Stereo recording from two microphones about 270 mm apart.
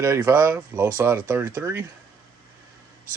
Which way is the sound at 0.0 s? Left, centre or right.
Centre.